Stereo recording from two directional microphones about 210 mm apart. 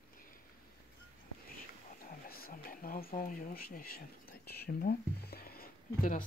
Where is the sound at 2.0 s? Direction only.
45° left (ahead or behind).